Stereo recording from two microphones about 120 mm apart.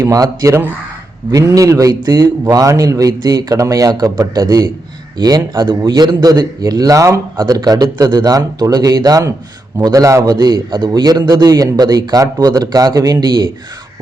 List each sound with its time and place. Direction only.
0.0 s a man's voice: 30° right (ahead or behind)
10.3 s a man's voice: 35° right (ahead or behind)